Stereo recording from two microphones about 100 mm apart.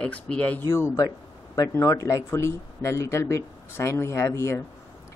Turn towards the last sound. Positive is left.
turn(degrees=30)  # may be behind; listen again after turning